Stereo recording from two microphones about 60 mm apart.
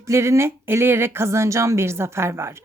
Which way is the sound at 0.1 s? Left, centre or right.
Right.